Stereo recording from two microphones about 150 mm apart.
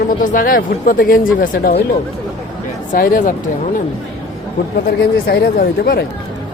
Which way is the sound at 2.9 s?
70° left (ahead or behind).